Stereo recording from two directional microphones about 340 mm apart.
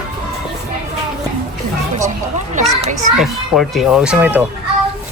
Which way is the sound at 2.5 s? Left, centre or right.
Right.